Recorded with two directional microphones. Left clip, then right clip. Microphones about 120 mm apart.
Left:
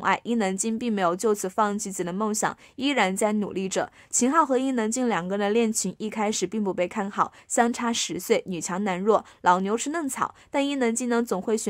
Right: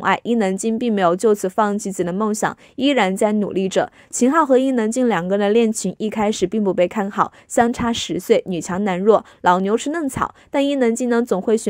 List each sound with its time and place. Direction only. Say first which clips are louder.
0.0 s a woman's voice: right 6 dB; 40° right (ahead or behind)